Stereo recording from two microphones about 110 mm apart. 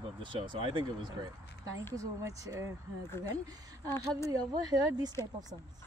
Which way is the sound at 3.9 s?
25° left (ahead or behind).